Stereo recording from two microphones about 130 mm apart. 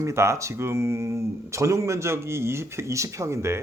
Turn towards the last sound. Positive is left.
turn(degrees=-20)  # may be behind; listen again after turning